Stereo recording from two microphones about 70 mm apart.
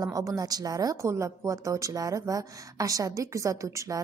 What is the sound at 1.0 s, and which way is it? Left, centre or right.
A woman's voice, right.